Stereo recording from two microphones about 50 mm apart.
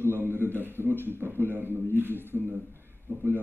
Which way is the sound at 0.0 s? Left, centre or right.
Right.